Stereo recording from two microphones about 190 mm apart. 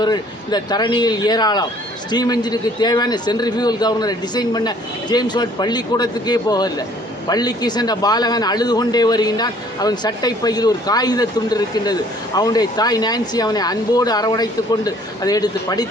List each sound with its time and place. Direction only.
0.0 s a man's voice: 20° left (ahead or behind)